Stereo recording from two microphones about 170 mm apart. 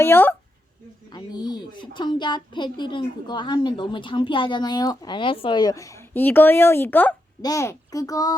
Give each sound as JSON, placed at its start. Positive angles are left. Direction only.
{"t": 0.0, "sound": "speech", "side_deg": 10}
{"t": 1.1, "sound": "speech", "side_deg": 25}